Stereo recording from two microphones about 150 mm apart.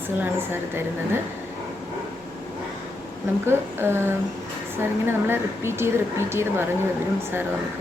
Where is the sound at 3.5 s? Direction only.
15° right (ahead or behind).